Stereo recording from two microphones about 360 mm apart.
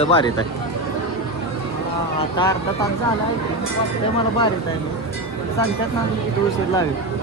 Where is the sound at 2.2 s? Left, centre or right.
Centre.